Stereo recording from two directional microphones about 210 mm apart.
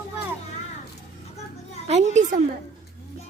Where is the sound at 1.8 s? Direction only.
30° right (ahead or behind).